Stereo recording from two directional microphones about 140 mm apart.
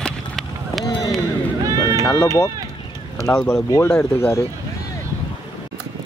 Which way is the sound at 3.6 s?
20° left (ahead or behind).